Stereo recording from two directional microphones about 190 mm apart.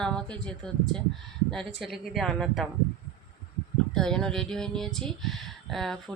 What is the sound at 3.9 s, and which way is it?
Speech, 5° left (ahead or behind).